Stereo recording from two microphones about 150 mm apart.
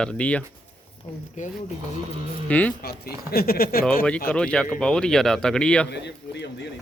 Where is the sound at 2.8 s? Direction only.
90° left.